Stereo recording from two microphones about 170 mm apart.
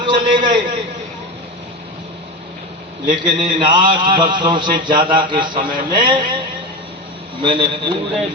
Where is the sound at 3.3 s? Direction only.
30° right (ahead or behind).